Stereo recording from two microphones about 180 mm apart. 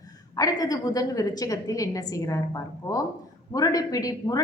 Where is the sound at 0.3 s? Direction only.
20° left (ahead or behind).